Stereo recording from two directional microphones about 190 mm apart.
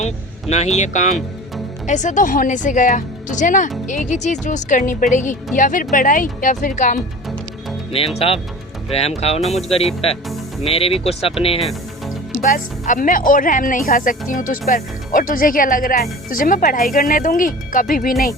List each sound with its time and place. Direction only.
1.9 s speech: 40° left (ahead or behind)
7.9 s speech: 30° left (ahead or behind)
11.6 s music: centre (ahead or behind)
12.4 s speech: 45° left (ahead or behind)